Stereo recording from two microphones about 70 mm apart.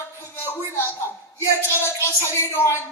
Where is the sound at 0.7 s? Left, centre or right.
Left.